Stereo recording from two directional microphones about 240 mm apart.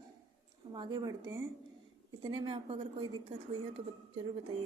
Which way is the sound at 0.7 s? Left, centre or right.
Centre.